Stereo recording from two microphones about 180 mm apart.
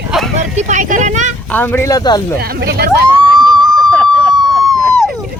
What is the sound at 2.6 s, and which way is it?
Speech, 60° right (ahead or behind).